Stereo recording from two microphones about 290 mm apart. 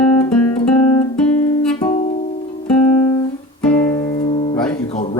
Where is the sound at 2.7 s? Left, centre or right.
Centre.